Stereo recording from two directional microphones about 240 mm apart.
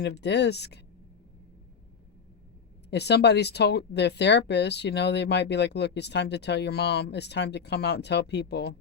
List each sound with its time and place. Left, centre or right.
0.0 s speech: left
2.9 s speech: left